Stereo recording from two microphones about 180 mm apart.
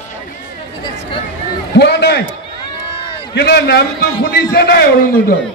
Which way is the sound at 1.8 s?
70° left (ahead or behind).